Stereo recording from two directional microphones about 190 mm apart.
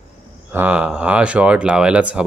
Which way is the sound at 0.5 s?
10° right (ahead or behind).